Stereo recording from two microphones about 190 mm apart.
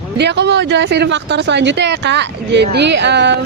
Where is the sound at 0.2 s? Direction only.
65° right (ahead or behind).